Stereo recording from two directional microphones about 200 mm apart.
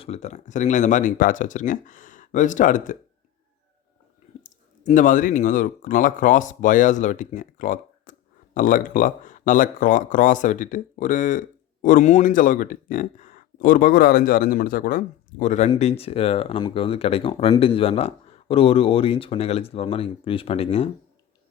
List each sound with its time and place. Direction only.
0.0 s speech: 35° left (ahead or behind)
4.4 s speech: 40° left (ahead or behind)